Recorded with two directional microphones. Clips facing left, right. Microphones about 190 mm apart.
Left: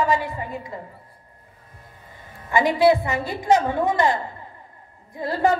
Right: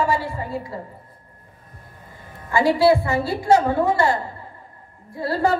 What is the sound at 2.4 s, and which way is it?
A woman's voice, 20° left (ahead or behind).